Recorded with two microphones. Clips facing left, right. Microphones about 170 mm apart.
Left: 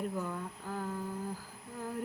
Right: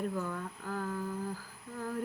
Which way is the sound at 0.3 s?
20° left (ahead or behind).